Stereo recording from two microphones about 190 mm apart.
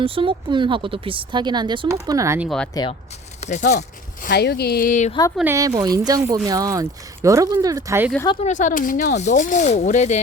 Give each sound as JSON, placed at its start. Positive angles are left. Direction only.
{"t": 0.0, "sound": "speech", "side_deg": -30}
{"t": 2.8, "sound": "speech", "side_deg": 20}
{"t": 3.4, "sound": "speech", "side_deg": 40}
{"t": 3.8, "sound": "speech", "side_deg": 60}
{"t": 5.4, "sound": "speech", "side_deg": -15}
{"t": 8.4, "sound": "speech", "side_deg": 40}